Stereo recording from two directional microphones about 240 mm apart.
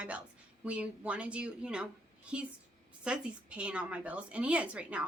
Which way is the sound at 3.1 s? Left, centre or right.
Centre.